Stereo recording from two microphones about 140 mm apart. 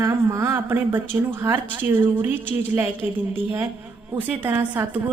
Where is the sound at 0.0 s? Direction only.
20° right (ahead or behind).